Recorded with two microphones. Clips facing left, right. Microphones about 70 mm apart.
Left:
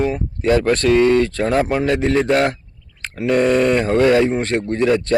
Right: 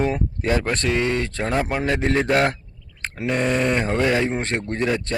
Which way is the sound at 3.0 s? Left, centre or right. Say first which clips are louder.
Left 3 dB; right.